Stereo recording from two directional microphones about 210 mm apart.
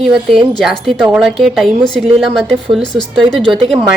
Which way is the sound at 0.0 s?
Centre (ahead or behind).